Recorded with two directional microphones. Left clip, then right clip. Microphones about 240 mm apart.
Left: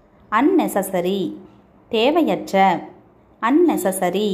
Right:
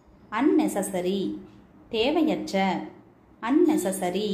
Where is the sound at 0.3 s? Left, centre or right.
Left.